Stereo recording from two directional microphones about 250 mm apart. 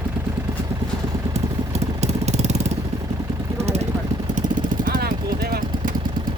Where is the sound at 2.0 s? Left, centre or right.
Right.